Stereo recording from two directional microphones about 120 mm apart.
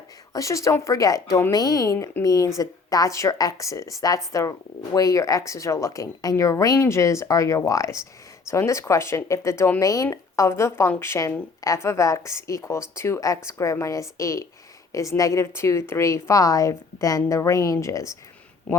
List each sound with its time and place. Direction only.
0.3 s speech: 25° left (ahead or behind)